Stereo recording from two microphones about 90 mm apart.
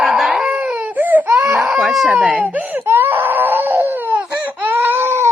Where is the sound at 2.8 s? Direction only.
25° right (ahead or behind).